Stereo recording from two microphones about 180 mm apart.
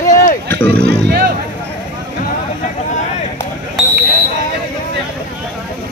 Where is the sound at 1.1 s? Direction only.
60° right (ahead or behind).